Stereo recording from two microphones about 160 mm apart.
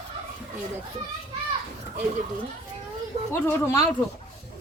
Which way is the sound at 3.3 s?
15° left (ahead or behind).